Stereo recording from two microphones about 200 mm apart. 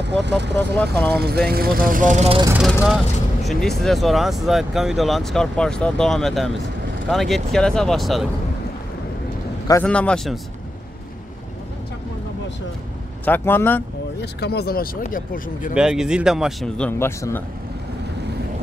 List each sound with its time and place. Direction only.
0.2 s speech: 60° right (ahead or behind)
0.6 s speech: 5° left (ahead or behind)
1.5 s speech: 50° right (ahead or behind); by 2.4 s 35° right (ahead or behind)
2.6 s speech: centre (ahead or behind)
9.8 s speech: 5° left (ahead or behind)
13.2 s speech: 10° left (ahead or behind)
14.2 s speech: 55° left (ahead or behind)
15.7 s speech: 5° right (ahead or behind)